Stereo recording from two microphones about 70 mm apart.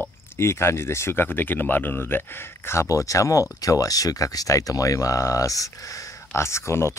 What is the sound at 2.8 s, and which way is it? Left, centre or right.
Speech, left.